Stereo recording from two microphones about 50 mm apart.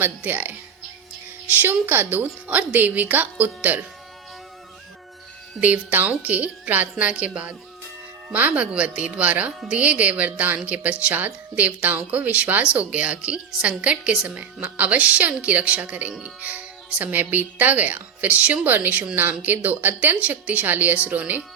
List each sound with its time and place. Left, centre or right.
0.0 s speech: right
5.5 s speech: right